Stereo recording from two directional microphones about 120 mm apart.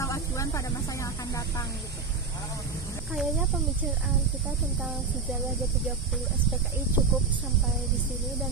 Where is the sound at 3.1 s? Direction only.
5° right (ahead or behind).